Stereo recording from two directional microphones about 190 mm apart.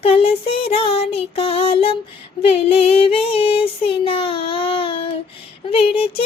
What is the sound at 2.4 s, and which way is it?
Child singing, 30° left (ahead or behind).